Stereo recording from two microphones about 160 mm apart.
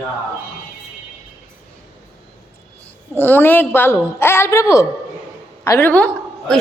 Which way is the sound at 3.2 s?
10° left (ahead or behind).